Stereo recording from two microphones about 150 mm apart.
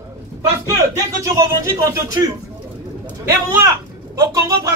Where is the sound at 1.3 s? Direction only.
20° right (ahead or behind).